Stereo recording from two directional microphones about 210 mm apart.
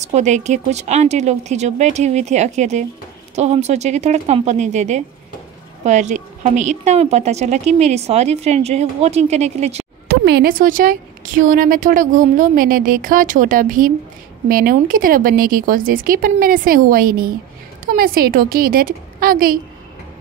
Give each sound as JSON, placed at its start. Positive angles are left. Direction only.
{"t": 0.0, "sound": "a woman's voice", "side_deg": -35}
{"t": 10.0, "sound": "a woman's voice", "side_deg": -50}